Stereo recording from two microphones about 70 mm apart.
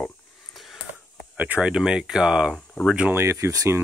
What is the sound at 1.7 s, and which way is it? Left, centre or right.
Speech, centre.